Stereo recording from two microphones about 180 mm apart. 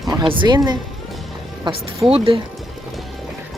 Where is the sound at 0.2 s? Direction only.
25° right (ahead or behind).